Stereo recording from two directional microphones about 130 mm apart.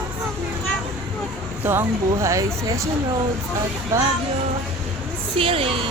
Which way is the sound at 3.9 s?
20° right (ahead or behind).